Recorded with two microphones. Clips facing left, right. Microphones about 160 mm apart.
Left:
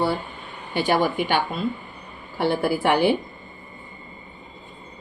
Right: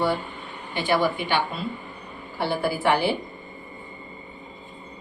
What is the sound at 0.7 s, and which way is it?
Speech, 45° left (ahead or behind).